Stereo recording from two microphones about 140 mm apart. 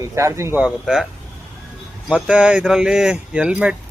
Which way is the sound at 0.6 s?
5° right (ahead or behind).